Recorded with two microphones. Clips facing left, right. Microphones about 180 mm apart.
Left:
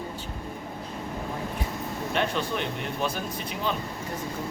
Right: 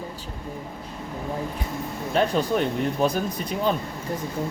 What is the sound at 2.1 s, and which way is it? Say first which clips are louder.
Speech: right 7 dB; 40° right (ahead or behind).